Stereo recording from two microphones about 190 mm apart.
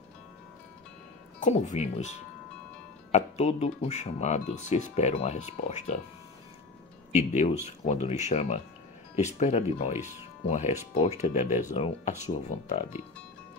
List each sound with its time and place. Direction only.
1.4 s speech: 40° left (ahead or behind)
7.1 s speech: 35° left (ahead or behind)
9.9 s speech: 10° right (ahead or behind)
10.4 s speech: 35° left (ahead or behind)